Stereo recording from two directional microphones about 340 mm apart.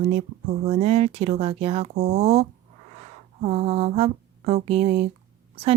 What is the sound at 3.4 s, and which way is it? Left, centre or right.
Speech, centre.